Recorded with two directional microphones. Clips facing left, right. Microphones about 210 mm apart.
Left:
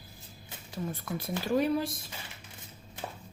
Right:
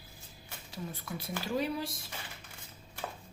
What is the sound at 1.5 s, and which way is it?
Speech, 55° left (ahead or behind).